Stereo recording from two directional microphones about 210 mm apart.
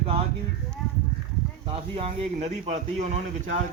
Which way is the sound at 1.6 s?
25° right (ahead or behind).